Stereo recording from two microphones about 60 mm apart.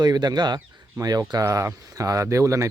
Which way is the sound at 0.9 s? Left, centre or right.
Right.